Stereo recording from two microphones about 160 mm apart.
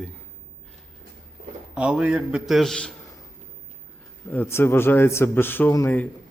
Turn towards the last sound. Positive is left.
turn(degrees=15)  # may be behind; listen again after turning